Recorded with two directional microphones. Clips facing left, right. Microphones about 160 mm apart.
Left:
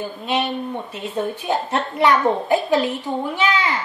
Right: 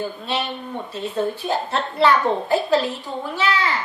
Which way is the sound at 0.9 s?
15° left (ahead or behind).